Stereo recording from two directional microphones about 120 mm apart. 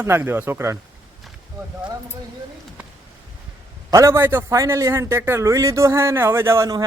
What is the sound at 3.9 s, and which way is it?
A man's voice, 25° right (ahead or behind).